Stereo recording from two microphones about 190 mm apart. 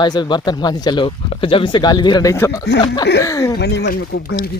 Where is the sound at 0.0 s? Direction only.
25° left (ahead or behind).